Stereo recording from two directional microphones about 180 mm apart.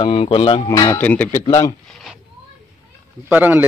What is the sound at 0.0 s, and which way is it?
Speech, 30° left (ahead or behind).